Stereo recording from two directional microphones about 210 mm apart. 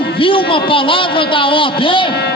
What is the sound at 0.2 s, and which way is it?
A man's voice, 25° left (ahead or behind).